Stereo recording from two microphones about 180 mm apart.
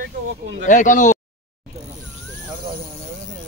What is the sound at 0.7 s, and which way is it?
Speech, 45° left (ahead or behind).